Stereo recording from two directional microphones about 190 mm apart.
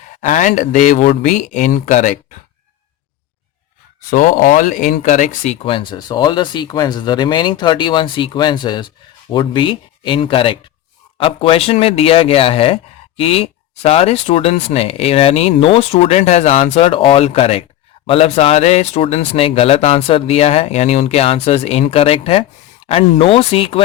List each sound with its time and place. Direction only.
0.2 s speech: 40° left (ahead or behind)
4.1 s speech: 45° left (ahead or behind); by 23.8 s 30° left (ahead or behind)